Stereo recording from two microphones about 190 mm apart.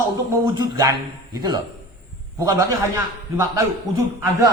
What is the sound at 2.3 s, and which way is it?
Speech, 15° right (ahead or behind).